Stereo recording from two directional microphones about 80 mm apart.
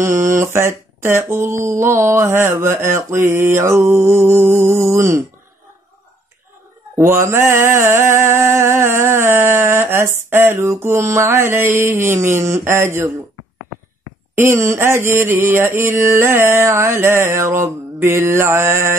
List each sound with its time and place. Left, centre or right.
0.0 s mantra: right
7.0 s mantra: right
14.3 s mantra: right